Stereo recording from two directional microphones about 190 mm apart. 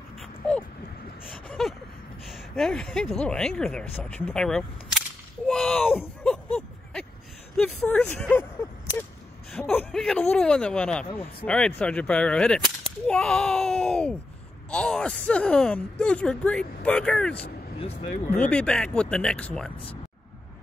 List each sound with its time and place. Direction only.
0.2 s a sound: 5° left (ahead or behind)
1.6 s speech: centre (ahead or behind)
5.5 s a sound: centre (ahead or behind)
7.5 s speech: 5° left (ahead or behind)
17.7 s speech: 35° left (ahead or behind)
18.3 s speech: 5° left (ahead or behind)